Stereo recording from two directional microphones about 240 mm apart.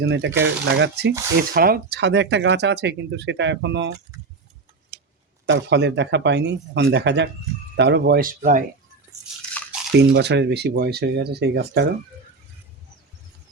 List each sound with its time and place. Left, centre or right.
0.0 s speech: right
5.5 s speech: right
9.9 s speech: right